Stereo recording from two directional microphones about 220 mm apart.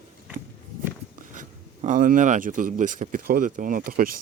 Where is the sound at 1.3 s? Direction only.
35° right (ahead or behind).